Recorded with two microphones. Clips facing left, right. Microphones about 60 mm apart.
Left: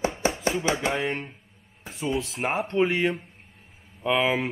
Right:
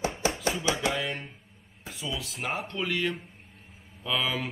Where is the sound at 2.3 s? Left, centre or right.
Left.